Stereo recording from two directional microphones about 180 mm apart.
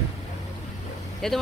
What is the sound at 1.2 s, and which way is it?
Speech, 5° left (ahead or behind).